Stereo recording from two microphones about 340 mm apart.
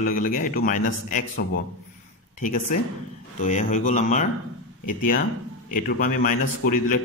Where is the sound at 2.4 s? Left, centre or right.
Left.